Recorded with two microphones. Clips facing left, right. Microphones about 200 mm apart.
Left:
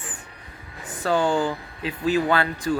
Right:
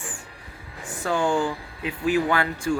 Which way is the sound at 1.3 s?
20° left (ahead or behind).